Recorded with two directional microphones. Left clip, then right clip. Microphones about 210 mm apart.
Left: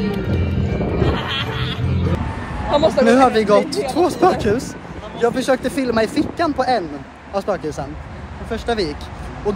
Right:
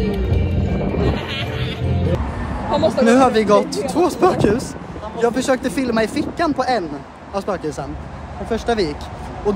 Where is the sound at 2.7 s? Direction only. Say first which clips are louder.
Left 2 dB; 40° left (ahead or behind).